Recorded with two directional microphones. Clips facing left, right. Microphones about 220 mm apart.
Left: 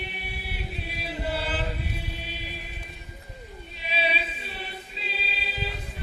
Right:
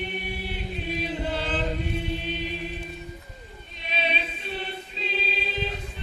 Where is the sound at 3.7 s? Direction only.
5° left (ahead or behind).